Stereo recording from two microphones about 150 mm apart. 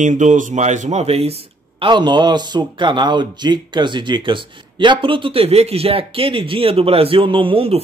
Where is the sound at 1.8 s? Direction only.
30° right (ahead or behind).